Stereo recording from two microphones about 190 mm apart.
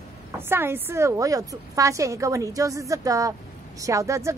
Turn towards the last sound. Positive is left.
turn(degrees=-15)  # may be behind; listen again after turning